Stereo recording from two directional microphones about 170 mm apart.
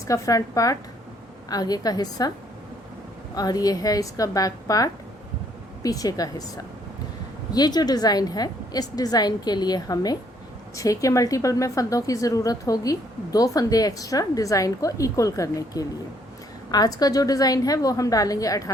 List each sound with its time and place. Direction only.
0.1 s a woman's voice: 20° left (ahead or behind)
3.3 s a woman's voice: 20° left (ahead or behind)
7.5 s a woman's voice: 25° left (ahead or behind)